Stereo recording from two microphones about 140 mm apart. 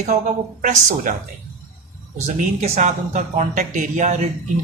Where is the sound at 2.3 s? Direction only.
55° right (ahead or behind).